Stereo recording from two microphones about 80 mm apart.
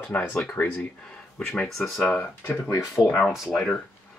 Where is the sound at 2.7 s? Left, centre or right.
Left.